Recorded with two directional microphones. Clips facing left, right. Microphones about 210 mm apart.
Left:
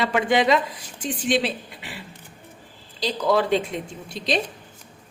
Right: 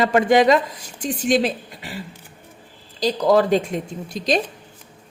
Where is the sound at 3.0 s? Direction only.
40° right (ahead or behind).